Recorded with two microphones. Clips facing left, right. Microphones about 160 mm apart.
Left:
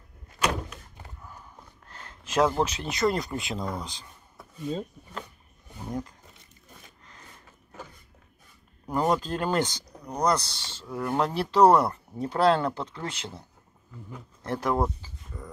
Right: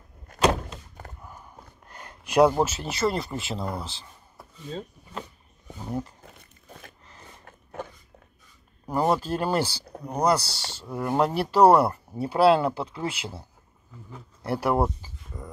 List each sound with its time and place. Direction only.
0.4 s door: 30° right (ahead or behind)
1.9 s speech: 10° right (ahead or behind)
4.4 s a sound: centre (ahead or behind)
6.2 s tearing: 55° right (ahead or behind)
7.8 s a sound: 60° right (ahead or behind)
8.8 s speech: 10° right (ahead or behind)